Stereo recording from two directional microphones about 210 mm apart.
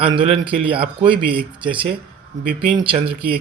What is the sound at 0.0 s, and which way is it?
Speech, 25° right (ahead or behind).